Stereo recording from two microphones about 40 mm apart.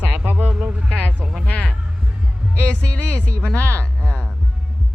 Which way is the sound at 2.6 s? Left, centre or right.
Left.